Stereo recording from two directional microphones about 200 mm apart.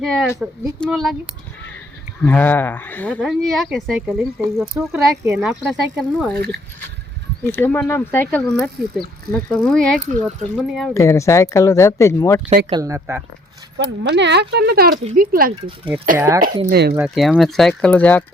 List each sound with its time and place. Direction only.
0.0 s speech: centre (ahead or behind)
2.2 s speech: 10° left (ahead or behind)
7.4 s speech: 10° left (ahead or behind)
10.9 s speech: 15° left (ahead or behind)
12.7 s speech: 15° right (ahead or behind)
13.7 s speech: 60° right (ahead or behind); by 15.5 s 45° right (ahead or behind)
16.1 s speech: 15° right (ahead or behind)
16.6 s speech: 55° right (ahead or behind)
16.9 s speech: 5° right (ahead or behind)